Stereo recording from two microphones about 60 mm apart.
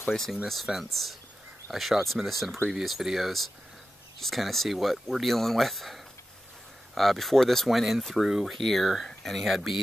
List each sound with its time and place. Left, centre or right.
0.1 s speech: centre
7.0 s speech: centre